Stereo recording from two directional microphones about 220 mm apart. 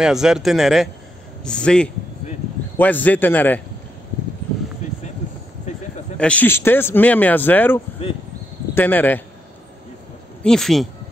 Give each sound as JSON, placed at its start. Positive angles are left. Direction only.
{"t": 0.0, "sound": "speech", "side_deg": -5}
{"t": 6.1, "sound": "speech", "side_deg": 5}
{"t": 10.4, "sound": "speech", "side_deg": 0}